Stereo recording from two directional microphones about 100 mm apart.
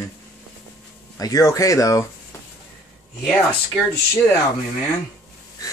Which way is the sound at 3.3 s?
15° left (ahead or behind).